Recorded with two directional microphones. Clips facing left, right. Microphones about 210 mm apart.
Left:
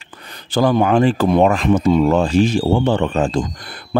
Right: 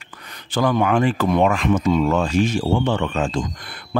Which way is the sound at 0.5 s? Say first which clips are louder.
Left 4 dB; 35° left (ahead or behind).